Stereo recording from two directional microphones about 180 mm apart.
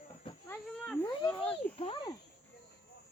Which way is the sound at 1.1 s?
25° left (ahead or behind).